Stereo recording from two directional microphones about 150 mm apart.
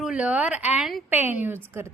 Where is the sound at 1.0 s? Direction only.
10° right (ahead or behind).